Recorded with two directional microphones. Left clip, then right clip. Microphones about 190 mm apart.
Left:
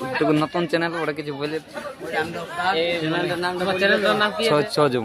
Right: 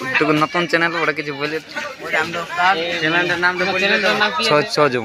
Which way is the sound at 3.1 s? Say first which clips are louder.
Right 7 dB; 25° right (ahead or behind).